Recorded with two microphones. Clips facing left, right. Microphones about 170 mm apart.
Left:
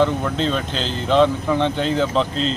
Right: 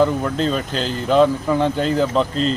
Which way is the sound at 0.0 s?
5° right (ahead or behind).